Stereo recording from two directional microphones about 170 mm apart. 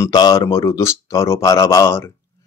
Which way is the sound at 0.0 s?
25° left (ahead or behind).